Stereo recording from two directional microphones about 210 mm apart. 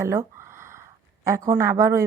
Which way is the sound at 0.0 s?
10° right (ahead or behind).